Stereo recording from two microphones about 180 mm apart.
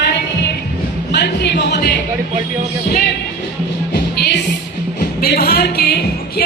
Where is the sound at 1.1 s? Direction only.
70° left (ahead or behind).